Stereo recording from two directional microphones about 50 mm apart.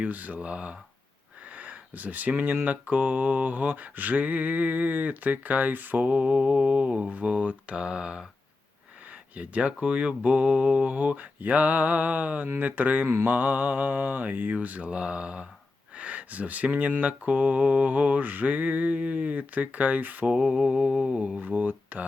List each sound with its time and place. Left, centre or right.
0.0 s mantra: right
0.3 s speech: right
1.5 s speech: right
2.6 s mantra: right; by 7.1 s centre
7.1 s speech: right
9.3 s speech: right
10.9 s mantra: right
14.8 s speech: right
17.0 s mantra: right
20.4 s mantra: centre
21.4 s mantra: right